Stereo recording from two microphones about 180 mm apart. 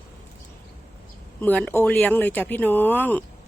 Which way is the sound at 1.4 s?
10° left (ahead or behind).